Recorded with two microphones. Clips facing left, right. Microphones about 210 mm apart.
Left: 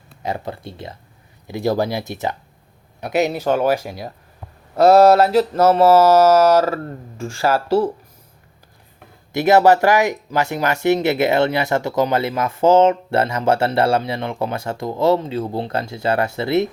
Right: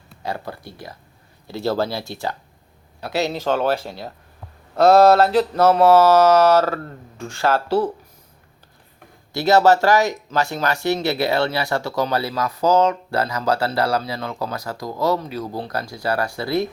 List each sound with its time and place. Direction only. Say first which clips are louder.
0.2 s speech: left 3 dB; 20° left (ahead or behind)
1.5 s mantra: left 2 dB; 15° left (ahead or behind)
9.3 s speech: left 2 dB; 20° left (ahead or behind)